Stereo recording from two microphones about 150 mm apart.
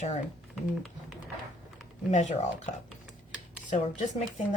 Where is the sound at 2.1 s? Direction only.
50° left (ahead or behind).